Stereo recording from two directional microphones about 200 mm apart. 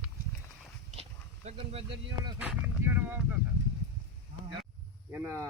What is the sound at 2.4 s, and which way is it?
Speech, 5° right (ahead or behind).